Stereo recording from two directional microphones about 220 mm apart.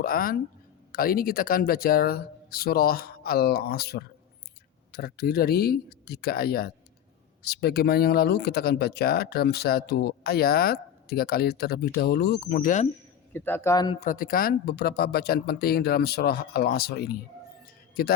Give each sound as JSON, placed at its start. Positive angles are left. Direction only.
{"t": 0.0, "sound": "speech", "side_deg": 40}
{"t": 13.3, "sound": "speech", "side_deg": 10}
{"t": 14.0, "sound": "speech", "side_deg": 40}